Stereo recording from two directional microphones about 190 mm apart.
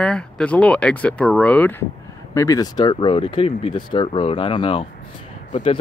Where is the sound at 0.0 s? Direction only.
5° left (ahead or behind).